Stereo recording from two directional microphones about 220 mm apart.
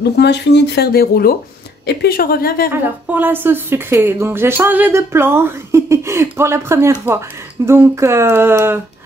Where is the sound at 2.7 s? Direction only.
10° right (ahead or behind).